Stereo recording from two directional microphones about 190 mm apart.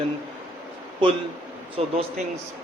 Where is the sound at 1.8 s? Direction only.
35° right (ahead or behind).